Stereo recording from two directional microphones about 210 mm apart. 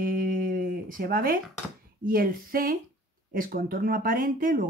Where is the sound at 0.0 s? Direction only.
40° right (ahead or behind).